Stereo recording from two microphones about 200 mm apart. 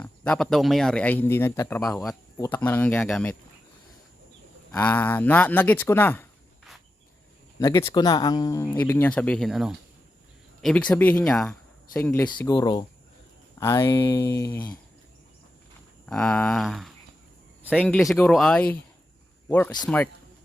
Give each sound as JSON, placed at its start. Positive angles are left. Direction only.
{"t": 0.0, "sound": "speech", "side_deg": 5}
{"t": 4.7, "sound": "speech", "side_deg": 10}
{"t": 7.6, "sound": "speech", "side_deg": 20}
{"t": 11.9, "sound": "speech", "side_deg": 15}
{"t": 16.0, "sound": "speech", "side_deg": 5}